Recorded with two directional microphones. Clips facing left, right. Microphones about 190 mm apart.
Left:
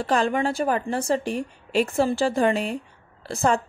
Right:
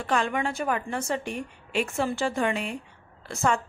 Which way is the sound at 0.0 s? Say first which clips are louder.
Left 4 dB; 35° left (ahead or behind).